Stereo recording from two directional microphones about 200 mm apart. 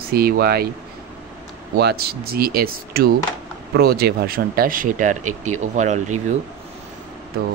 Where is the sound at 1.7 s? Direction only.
55° right (ahead or behind); by 6.0 s 35° right (ahead or behind).